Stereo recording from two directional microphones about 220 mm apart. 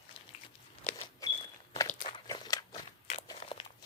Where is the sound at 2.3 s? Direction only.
15° left (ahead or behind).